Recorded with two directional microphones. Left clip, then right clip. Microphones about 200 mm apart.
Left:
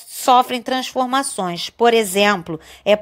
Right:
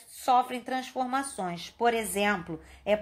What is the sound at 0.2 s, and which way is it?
Speech, 40° left (ahead or behind).